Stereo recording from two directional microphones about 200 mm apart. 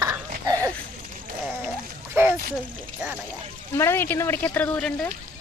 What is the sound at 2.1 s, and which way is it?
Speech, 10° right (ahead or behind).